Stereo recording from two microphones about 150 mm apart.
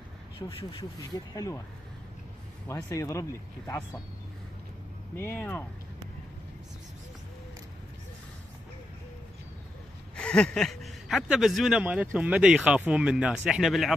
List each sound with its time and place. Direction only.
0.4 s speech: 35° left (ahead or behind)
2.7 s speech: 20° left (ahead or behind)
5.1 s speech: 15° left (ahead or behind)
10.1 s speech: 5° left (ahead or behind)